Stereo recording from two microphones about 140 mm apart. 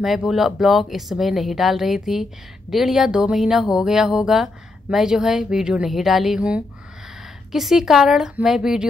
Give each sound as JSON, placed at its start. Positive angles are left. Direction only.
{"t": 0.0, "sound": "speech", "side_deg": 0}